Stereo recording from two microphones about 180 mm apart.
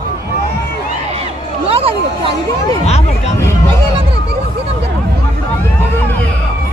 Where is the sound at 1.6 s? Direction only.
30° right (ahead or behind).